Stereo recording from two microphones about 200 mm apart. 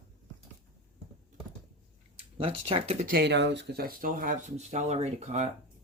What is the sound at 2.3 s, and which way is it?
Speech, 30° right (ahead or behind).